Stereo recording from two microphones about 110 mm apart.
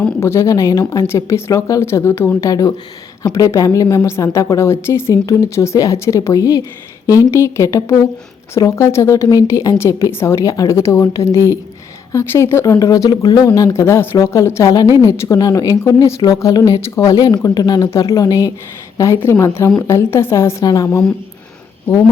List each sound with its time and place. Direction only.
0.2 s a woman's voice: 25° left (ahead or behind)